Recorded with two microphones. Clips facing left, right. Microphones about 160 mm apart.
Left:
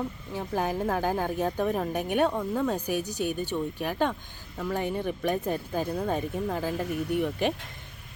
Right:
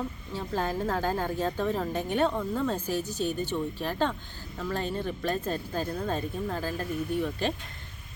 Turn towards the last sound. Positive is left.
turn(degrees=15)  # may be behind; listen again after turning